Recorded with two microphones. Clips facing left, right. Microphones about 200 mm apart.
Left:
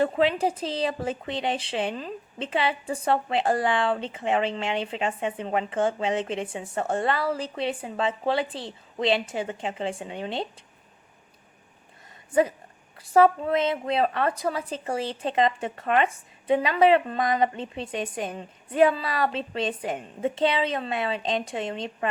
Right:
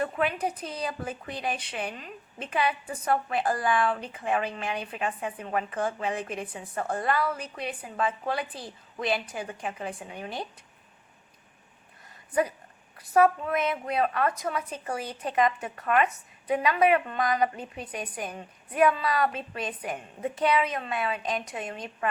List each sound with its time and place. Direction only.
0.0 s speech: 25° left (ahead or behind)
12.3 s speech: 25° left (ahead or behind)